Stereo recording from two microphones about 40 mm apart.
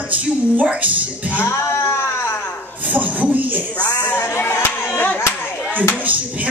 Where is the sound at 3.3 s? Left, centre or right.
Right.